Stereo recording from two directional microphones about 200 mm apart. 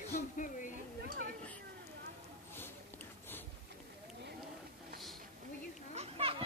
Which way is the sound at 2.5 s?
10° left (ahead or behind).